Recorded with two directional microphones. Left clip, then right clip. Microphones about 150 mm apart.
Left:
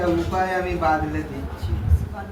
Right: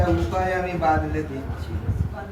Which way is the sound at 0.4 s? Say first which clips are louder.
Left 1 dB; 15° left (ahead or behind).